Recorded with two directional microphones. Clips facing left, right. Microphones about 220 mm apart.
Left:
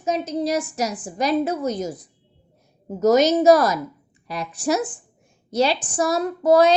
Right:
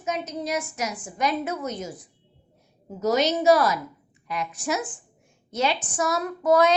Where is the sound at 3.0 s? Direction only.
45° left (ahead or behind).